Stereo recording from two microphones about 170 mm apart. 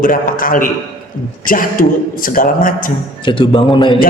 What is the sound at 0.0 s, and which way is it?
A man's voice, 55° left (ahead or behind).